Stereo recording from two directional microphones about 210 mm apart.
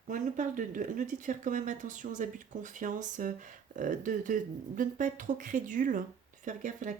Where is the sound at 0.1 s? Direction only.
40° right (ahead or behind).